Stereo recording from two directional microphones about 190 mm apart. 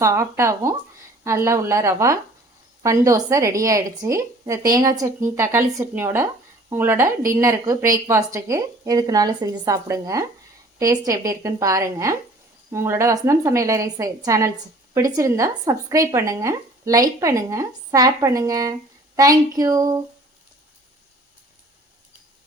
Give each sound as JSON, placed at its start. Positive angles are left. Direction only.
{"t": 0.0, "sound": "speech", "side_deg": -15}